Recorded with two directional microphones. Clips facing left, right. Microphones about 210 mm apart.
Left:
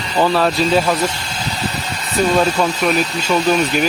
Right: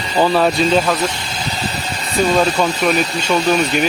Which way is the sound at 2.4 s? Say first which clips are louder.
Even; centre (ahead or behind).